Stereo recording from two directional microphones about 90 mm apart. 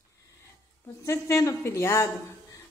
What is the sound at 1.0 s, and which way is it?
A woman's voice, 35° left (ahead or behind).